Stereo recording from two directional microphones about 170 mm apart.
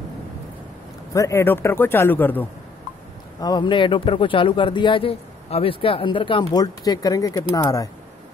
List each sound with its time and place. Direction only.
1.1 s a man's voice: 15° left (ahead or behind)
3.3 s speech: 25° left (ahead or behind)